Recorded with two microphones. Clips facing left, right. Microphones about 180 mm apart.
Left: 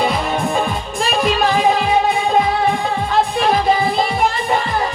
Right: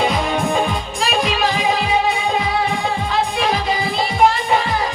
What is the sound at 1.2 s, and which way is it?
Music, 45° left (ahead or behind).